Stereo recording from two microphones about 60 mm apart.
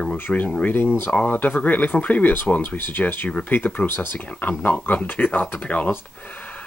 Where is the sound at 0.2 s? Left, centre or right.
Left.